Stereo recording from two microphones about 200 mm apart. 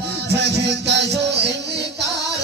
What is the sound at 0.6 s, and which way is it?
Music, 60° right (ahead or behind).